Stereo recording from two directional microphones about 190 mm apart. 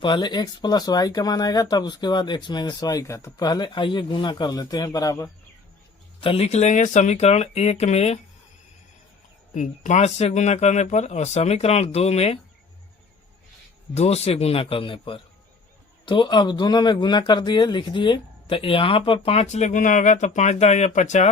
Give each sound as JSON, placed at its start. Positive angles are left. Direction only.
{"t": 0.0, "sound": "speech", "side_deg": 25}
{"t": 6.1, "sound": "speech", "side_deg": 30}
{"t": 9.6, "sound": "speech", "side_deg": 40}
{"t": 13.9, "sound": "speech", "side_deg": 35}